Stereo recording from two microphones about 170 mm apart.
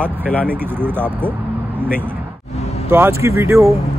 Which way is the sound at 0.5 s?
10° right (ahead or behind).